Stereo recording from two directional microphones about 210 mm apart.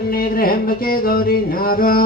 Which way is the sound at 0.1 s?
45° left (ahead or behind).